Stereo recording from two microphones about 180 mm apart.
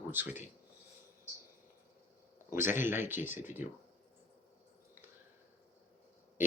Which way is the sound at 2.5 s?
10° right (ahead or behind).